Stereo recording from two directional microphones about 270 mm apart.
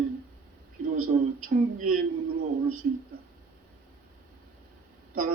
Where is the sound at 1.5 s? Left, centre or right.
Right.